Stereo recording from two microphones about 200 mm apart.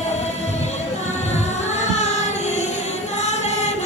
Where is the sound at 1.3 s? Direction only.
35° left (ahead or behind).